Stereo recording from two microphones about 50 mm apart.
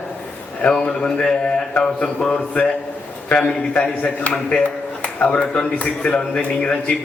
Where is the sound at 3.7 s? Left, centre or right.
Left.